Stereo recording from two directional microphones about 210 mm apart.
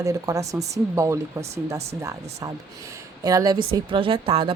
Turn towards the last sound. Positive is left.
turn(degrees=-25)  # may be behind; listen again after turning